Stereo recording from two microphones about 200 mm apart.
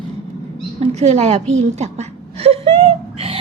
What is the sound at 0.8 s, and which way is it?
A woman's voice, 35° right (ahead or behind).